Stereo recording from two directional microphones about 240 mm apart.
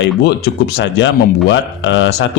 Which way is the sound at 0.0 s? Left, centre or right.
Left.